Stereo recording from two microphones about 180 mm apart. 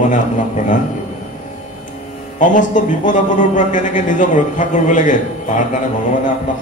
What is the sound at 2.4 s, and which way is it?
Mantra, 45° left (ahead or behind).